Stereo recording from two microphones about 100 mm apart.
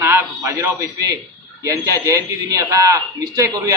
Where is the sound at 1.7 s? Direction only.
35° right (ahead or behind).